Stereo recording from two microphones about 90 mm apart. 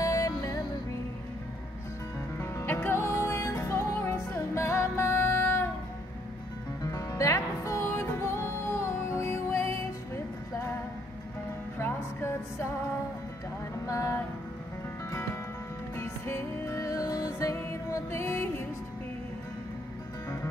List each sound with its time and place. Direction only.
0.0 s music: 35° left (ahead or behind)
2.4 s music: 25° left (ahead or behind)
6.9 s music: 35° left (ahead or behind)
11.8 s music: 25° left (ahead or behind)
13.8 s a sound: 35° left (ahead or behind)
16.0 s music: 30° left (ahead or behind)